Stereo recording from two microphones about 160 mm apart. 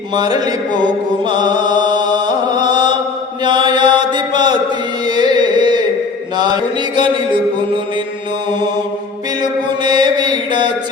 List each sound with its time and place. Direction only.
0.2 s mantra: 25° right (ahead or behind)
3.4 s chant: 30° right (ahead or behind)
5.0 s carnatic music: 25° right (ahead or behind)
6.3 s mantra: 25° right (ahead or behind)
9.4 s mantra: 25° right (ahead or behind)